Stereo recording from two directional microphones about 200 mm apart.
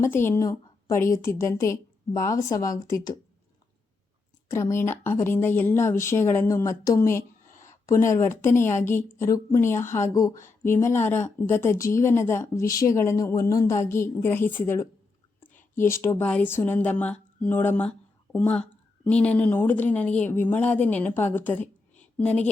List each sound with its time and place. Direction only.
0.0 s speech: 10° left (ahead or behind)
4.4 s speech: 15° left (ahead or behind)